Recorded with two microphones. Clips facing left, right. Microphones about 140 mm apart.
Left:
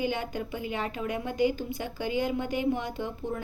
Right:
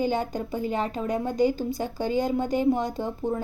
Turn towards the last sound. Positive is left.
turn(degrees=-40)  # may be behind; listen again after turning